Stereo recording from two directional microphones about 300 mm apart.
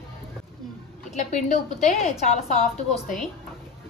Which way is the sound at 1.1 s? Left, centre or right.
Left.